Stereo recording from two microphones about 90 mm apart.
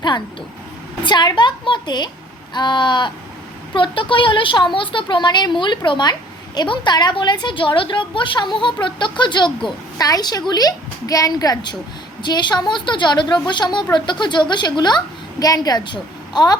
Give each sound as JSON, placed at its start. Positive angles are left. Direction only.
{"t": 1.0, "sound": "a woman's voice", "side_deg": 55}
{"t": 10.0, "sound": "a woman's voice", "side_deg": 45}